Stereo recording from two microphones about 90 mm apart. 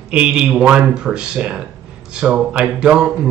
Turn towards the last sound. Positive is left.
turn(degrees=-10)  # may be behind; listen again after turning